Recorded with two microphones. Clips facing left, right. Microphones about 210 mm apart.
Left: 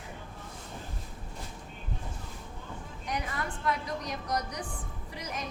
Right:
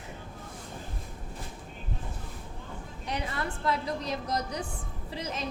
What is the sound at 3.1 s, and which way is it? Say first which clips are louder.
A woman's voice: right 1 dB; 30° right (ahead or behind).